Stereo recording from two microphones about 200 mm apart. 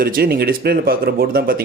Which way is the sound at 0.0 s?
50° right (ahead or behind).